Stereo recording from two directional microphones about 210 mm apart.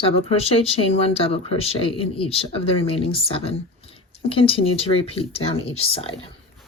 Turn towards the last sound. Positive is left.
turn(degrees=25)  # may be behind; listen again after turning